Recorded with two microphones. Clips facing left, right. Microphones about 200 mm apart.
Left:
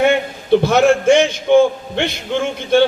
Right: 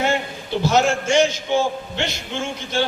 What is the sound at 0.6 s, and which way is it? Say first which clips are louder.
A man's voice: left 2 dB; 60° left (ahead or behind).